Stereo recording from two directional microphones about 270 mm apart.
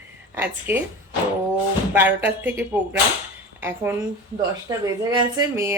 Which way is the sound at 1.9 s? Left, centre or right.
Centre.